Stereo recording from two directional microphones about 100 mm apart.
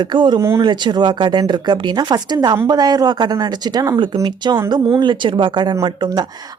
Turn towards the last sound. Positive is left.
turn(degrees=-45)  # may be behind; listen again after turning